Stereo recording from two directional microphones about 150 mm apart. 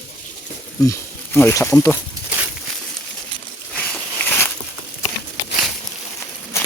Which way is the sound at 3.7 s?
10° left (ahead or behind).